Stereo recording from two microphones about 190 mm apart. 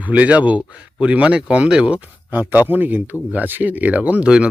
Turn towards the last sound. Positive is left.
turn(degrees=-5)  # may be behind; listen again after turning